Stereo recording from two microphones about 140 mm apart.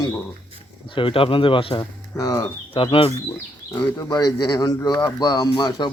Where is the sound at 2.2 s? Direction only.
25° left (ahead or behind).